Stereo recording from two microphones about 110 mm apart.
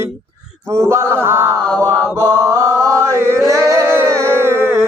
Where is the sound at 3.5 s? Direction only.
30° right (ahead or behind).